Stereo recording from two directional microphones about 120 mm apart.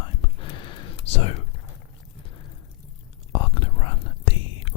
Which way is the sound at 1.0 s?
55° left (ahead or behind).